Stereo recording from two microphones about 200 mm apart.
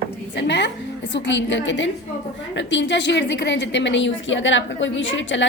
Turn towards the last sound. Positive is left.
turn(degrees=65)  # may be behind; listen again after turning